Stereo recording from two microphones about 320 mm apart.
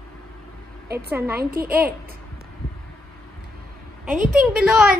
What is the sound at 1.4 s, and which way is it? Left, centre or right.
Speech, right.